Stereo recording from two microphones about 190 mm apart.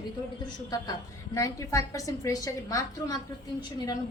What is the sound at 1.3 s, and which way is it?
A woman's voice, 15° left (ahead or behind).